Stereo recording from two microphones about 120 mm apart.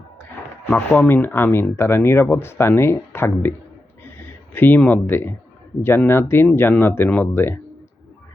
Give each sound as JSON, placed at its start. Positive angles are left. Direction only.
{"t": 0.7, "sound": "speech", "side_deg": 15}
{"t": 4.0, "sound": "a sound", "side_deg": 15}
{"t": 5.8, "sound": "speech", "side_deg": 20}